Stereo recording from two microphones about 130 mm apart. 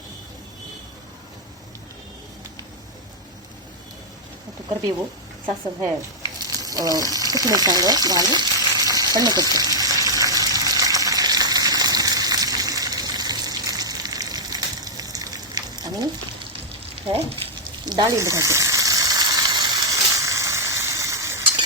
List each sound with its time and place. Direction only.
6.4 s a sound: 30° right (ahead or behind)
17.1 s speech: 50° right (ahead or behind)
17.8 s frying: 30° right (ahead or behind)